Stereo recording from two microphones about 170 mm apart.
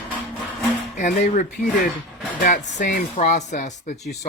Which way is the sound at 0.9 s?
50° left (ahead or behind).